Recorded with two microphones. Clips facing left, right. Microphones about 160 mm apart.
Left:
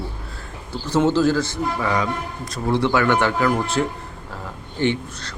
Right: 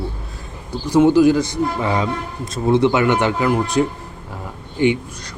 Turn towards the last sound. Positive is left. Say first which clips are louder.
# right 4 dB
turn(degrees=-10)  # may be behind; listen again after turning